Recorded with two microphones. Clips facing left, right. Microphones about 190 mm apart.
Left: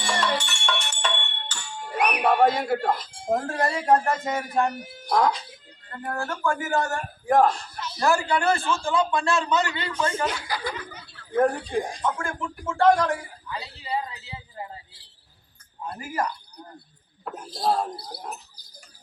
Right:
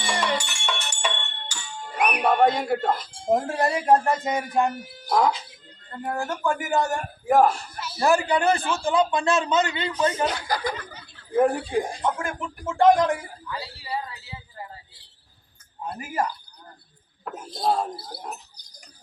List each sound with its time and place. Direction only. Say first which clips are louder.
0.0 s music: even; 5° right (ahead or behind)
2.0 s a sound: even; centre (ahead or behind)
3.2 s a man's voice: right 2 dB; 20° right (ahead or behind)
5.0 s speech: right 1 dB; 5° right (ahead or behind)
6.0 s speech: right 2 dB; 15° right (ahead or behind)
7.3 s a sound: right 1 dB; 5° right (ahead or behind)
8.0 s a man's voice: right 2 dB; 20° right (ahead or behind)
10.4 s speech: right 4 dB; 45° right (ahead or behind)
11.3 s speech: right 1 dB; 5° right (ahead or behind)
12.0 s a man's voice: right 1 dB; 20° right (ahead or behind)
13.5 s speech: left 1 dB; 20° left (ahead or behind)
15.9 s a man's voice: right 1 dB; 20° right (ahead or behind)
17.3 s speech: even; centre (ahead or behind)